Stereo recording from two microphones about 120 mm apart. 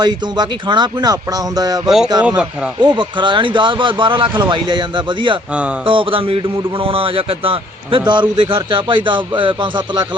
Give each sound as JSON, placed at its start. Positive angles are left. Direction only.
{"t": 0.0, "sound": "speech", "side_deg": -40}
{"t": 2.2, "sound": "speech", "side_deg": -10}
{"t": 2.8, "sound": "a man's voice", "side_deg": -40}